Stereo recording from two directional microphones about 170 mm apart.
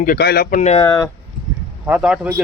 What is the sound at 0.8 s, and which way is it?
Speech, 20° left (ahead or behind).